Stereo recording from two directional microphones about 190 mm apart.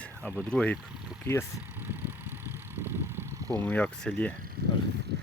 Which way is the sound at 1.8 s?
10° right (ahead or behind).